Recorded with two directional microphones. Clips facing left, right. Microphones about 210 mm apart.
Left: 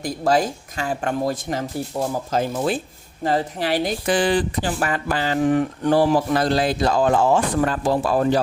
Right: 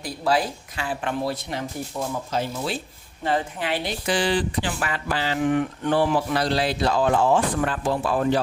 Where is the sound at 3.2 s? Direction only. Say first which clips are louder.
Left 3 dB; 40° left (ahead or behind).